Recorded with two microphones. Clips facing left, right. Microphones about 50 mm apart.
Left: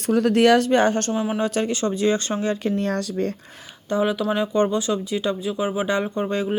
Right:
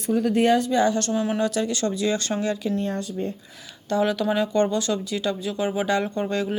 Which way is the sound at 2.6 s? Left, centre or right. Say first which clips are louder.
Left 3 dB; left.